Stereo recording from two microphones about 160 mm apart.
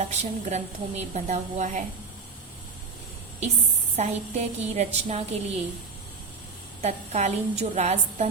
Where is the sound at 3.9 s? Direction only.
40° right (ahead or behind).